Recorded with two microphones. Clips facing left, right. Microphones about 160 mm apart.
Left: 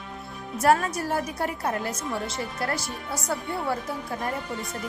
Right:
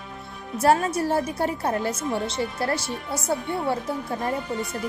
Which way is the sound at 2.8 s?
Centre (ahead or behind).